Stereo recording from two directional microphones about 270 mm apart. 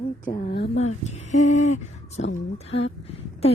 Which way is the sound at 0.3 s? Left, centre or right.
Left.